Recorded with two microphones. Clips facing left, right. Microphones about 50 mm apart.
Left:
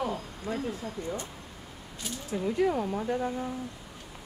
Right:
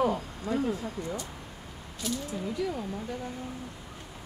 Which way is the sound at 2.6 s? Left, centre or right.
Left.